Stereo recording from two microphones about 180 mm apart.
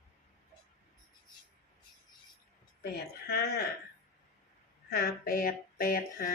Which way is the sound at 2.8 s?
60° left (ahead or behind).